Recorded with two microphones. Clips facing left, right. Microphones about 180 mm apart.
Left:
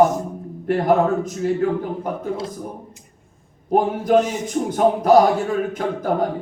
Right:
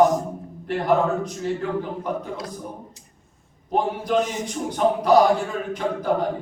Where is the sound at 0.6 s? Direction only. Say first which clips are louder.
Left 4 dB; 50° left (ahead or behind).